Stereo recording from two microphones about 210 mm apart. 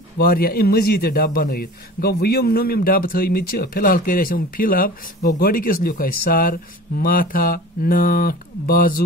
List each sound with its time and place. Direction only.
0.2 s a man's voice: 45° left (ahead or behind)